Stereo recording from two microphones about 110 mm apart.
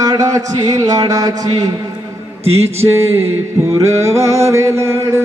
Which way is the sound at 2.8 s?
25° right (ahead or behind).